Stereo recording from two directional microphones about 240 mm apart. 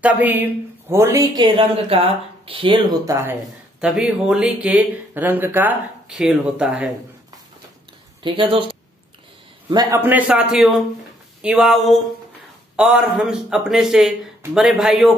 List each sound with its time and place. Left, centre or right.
0.0 s speech: centre
8.2 s speech: centre